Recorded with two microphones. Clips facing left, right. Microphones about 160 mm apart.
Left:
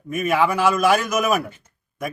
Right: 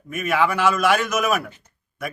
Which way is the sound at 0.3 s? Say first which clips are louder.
Left 1 dB; 10° left (ahead or behind).